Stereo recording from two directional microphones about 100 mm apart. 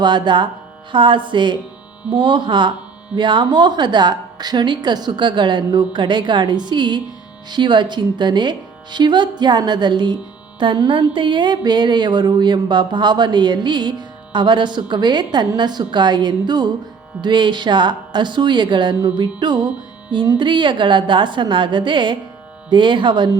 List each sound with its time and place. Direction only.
0.0 s a woman's voice: 50° right (ahead or behind)
0.9 s a sound: 55° right (ahead or behind)
2.0 s a woman's voice: 55° right (ahead or behind)